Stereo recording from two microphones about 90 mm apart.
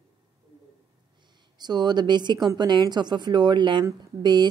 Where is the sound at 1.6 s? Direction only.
50° right (ahead or behind).